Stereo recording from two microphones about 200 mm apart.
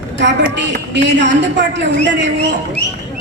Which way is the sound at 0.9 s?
60° right (ahead or behind).